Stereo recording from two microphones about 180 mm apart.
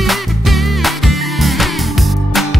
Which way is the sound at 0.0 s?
Centre (ahead or behind).